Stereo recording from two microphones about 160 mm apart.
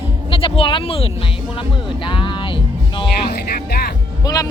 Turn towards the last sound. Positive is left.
turn(degrees=20)  # may be behind; listen again after turning